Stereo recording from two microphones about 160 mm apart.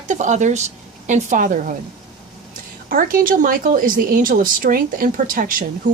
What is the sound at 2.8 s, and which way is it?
Speech, 60° right (ahead or behind).